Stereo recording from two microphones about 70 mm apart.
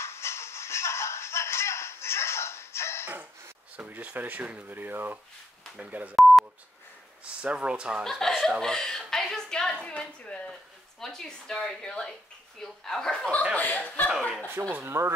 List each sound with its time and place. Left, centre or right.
0.0 s shuffle: left
3.1 s speech: right
7.4 s speech: centre
8.0 s a woman's voice: centre
13.6 s speech: left
14.7 s speech: right